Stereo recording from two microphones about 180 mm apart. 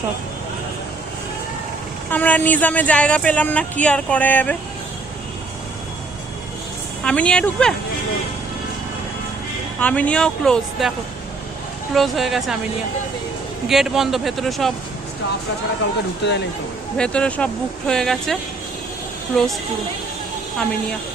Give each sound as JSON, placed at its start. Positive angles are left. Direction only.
{"t": 2.0, "sound": "speech", "side_deg": 10}
{"t": 7.0, "sound": "speech", "side_deg": 5}
{"t": 9.8, "sound": "speech", "side_deg": 5}
{"t": 11.9, "sound": "speech", "side_deg": 0}
{"t": 13.7, "sound": "speech", "side_deg": 0}
{"t": 16.2, "sound": "speech", "side_deg": 70}
{"t": 17.0, "sound": "speech", "side_deg": 5}
{"t": 19.3, "sound": "speech", "side_deg": 5}